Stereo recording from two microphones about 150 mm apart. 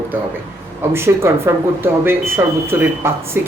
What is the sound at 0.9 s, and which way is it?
Speech, 15° right (ahead or behind).